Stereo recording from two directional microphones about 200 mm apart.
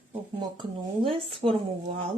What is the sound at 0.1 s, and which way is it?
A woman's voice, 25° right (ahead or behind).